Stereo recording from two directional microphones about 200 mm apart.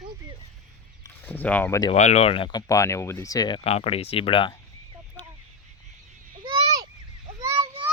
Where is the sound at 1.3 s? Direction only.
5° left (ahead or behind).